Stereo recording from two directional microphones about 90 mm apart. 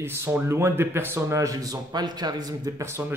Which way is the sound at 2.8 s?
25° right (ahead or behind).